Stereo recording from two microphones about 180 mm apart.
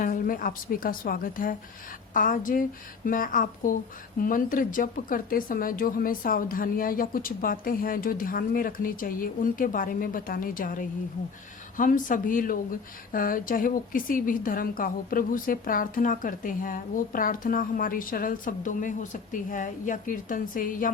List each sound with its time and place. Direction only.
0.0 s a woman's voice: 50° left (ahead or behind)